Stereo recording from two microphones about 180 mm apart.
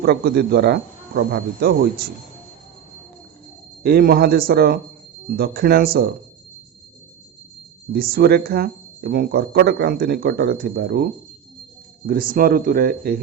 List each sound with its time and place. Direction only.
0.0 s speech: 65° right (ahead or behind)
3.8 s speech: 60° right (ahead or behind)
7.9 s speech: 55° right (ahead or behind)